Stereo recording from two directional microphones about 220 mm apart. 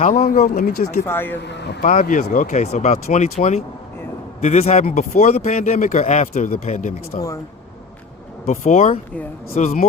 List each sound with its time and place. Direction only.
0.0 s speech: 40° left (ahead or behind)
1.0 s speech: 10° left (ahead or behind)
1.4 s vehicle: 50° left (ahead or behind)
1.8 s speech: 35° left (ahead or behind)
8.4 s speech: 30° left (ahead or behind)